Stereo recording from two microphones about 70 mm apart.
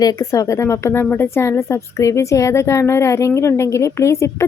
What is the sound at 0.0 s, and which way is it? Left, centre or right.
Speech, left.